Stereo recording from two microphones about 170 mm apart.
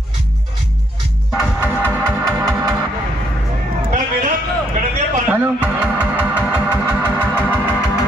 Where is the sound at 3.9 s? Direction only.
45° right (ahead or behind).